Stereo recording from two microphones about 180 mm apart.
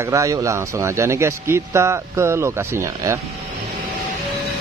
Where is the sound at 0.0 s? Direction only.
15° right (ahead or behind).